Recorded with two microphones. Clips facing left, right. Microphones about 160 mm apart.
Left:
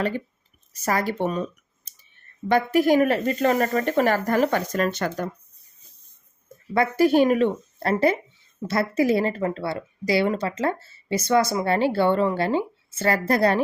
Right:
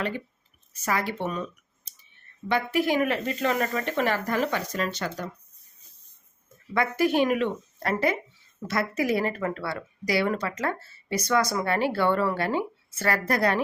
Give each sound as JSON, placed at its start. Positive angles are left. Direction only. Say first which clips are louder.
{"t": 0.7, "sound": "speech", "louder": "left 4 dB", "side_deg": 40}
{"t": 6.7, "sound": "a woman's voice", "louder": "left 5 dB", "side_deg": 35}